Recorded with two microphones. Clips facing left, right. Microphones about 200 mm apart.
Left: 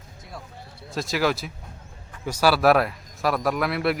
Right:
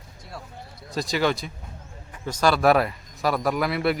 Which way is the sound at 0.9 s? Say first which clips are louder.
Even; centre (ahead or behind).